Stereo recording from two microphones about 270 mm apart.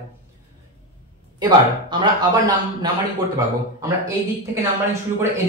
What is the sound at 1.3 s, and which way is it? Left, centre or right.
A man's voice, centre.